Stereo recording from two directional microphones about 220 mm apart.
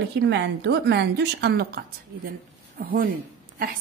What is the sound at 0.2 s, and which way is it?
A woman's voice, 50° right (ahead or behind).